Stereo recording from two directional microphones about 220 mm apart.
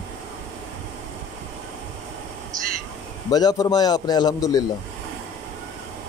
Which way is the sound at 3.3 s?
20° left (ahead or behind).